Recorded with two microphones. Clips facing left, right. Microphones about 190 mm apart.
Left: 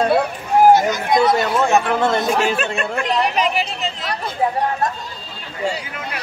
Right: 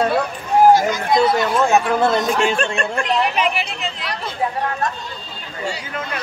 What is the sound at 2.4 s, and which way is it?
Speech, 5° left (ahead or behind).